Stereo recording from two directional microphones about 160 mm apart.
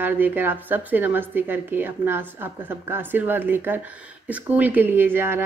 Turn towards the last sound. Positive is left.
turn(degrees=-15)  # may be behind; listen again after turning